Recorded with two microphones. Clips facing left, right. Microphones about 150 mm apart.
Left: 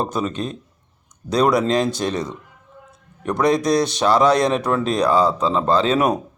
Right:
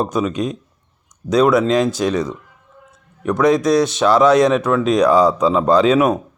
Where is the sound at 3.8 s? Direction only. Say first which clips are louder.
Right 4 dB; 35° left (ahead or behind).